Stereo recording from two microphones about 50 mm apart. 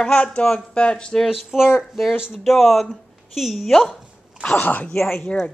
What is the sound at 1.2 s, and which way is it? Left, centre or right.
Speech, centre.